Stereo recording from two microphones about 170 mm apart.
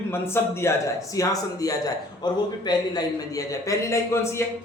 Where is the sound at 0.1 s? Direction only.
15° left (ahead or behind).